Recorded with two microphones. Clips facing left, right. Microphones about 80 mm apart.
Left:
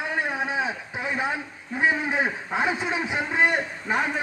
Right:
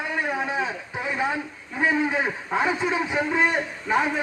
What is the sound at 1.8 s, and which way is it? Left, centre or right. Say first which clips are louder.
A man's voice: right 1 dB; centre.